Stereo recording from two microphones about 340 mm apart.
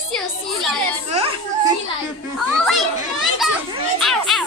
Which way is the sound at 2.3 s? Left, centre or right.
Centre.